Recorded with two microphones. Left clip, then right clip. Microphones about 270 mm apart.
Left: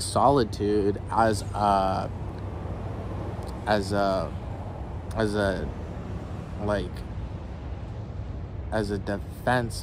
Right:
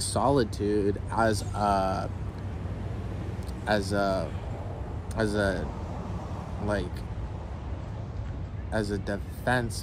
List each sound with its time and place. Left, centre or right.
0.0 s speech: centre
3.6 s speech: centre
8.7 s speech: centre